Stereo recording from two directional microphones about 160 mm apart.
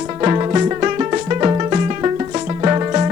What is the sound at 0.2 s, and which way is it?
Music, 20° right (ahead or behind).